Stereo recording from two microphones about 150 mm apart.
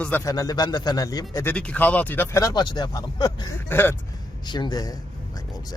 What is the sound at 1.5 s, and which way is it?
Speech, 10° left (ahead or behind).